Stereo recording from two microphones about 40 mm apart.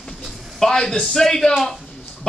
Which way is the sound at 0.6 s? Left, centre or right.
Centre.